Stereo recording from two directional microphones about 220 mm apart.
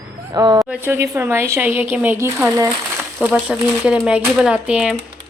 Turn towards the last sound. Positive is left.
turn(degrees=0)  # may be behind; listen again after turning